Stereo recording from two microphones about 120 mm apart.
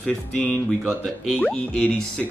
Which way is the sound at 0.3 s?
10° left (ahead or behind).